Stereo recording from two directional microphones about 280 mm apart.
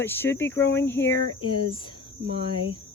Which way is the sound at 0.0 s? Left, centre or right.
Centre.